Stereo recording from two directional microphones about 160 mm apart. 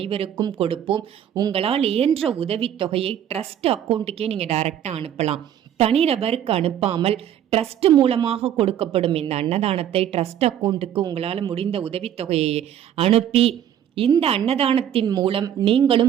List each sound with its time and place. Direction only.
0.0 s a woman's voice: 35° right (ahead or behind)